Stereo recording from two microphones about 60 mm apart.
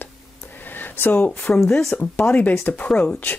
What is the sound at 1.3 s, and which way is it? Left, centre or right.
Speech, left.